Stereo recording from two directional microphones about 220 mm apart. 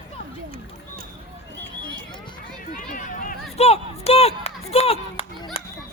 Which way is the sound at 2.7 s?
40° left (ahead or behind).